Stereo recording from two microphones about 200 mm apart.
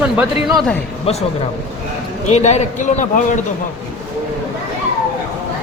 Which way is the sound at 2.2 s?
35° left (ahead or behind).